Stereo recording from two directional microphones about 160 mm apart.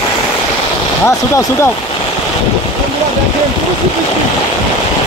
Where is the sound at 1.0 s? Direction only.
15° left (ahead or behind).